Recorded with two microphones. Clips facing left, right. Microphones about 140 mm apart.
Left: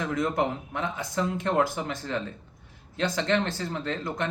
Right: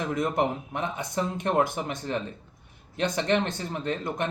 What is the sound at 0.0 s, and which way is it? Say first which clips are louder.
Speech: even; 20° right (ahead or behind).